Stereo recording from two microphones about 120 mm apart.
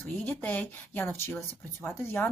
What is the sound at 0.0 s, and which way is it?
Speech, 15° left (ahead or behind).